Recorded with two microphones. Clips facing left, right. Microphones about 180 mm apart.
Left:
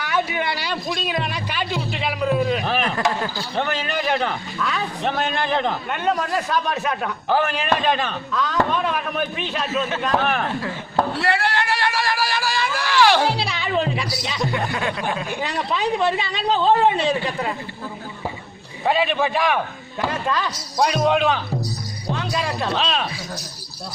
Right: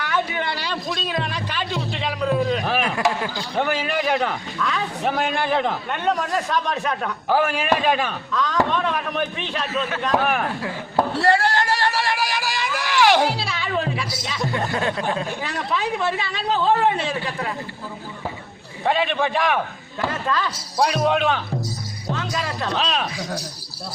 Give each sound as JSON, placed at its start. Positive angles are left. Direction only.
{"t": 0.0, "sound": "a sound", "side_deg": 10}
{"t": 1.0, "sound": "a man's voice", "side_deg": 10}
{"t": 8.3, "sound": "a man's voice", "side_deg": 5}
{"t": 11.1, "sound": "a sound", "side_deg": -40}
{"t": 13.2, "sound": "music", "side_deg": 20}
{"t": 14.7, "sound": "a sound", "side_deg": -35}
{"t": 15.4, "sound": "speech", "side_deg": 20}
{"t": 18.9, "sound": "a man's voice", "side_deg": 5}
{"t": 20.1, "sound": "speech", "side_deg": 15}
{"t": 20.7, "sound": "a man's voice", "side_deg": -5}
{"t": 22.1, "sound": "speech", "side_deg": 20}
{"t": 22.7, "sound": "a man's voice", "side_deg": 0}